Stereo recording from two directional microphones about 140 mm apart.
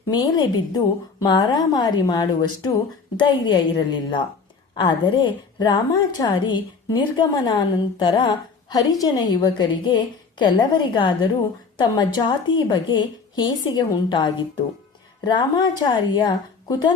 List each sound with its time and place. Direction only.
0.1 s a woman's voice: 30° left (ahead or behind)